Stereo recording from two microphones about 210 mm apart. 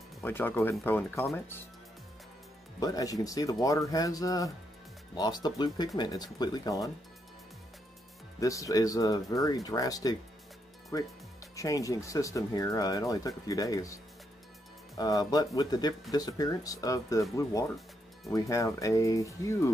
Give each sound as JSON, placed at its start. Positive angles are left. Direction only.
{"t": 0.2, "sound": "speech", "side_deg": 10}
{"t": 2.8, "sound": "speech", "side_deg": 15}
{"t": 8.4, "sound": "speech", "side_deg": 15}
{"t": 15.0, "sound": "speech", "side_deg": 15}